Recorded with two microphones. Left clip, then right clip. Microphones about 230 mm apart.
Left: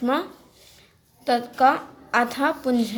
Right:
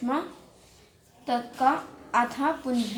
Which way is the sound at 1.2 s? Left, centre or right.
Left.